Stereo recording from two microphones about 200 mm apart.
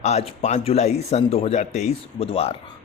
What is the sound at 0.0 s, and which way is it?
A man's voice, 30° left (ahead or behind).